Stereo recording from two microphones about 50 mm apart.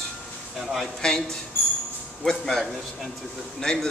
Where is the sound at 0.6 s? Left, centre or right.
Centre.